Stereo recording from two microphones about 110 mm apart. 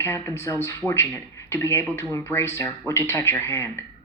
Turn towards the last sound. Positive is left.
turn(degrees=20)  # may be behind; listen again after turning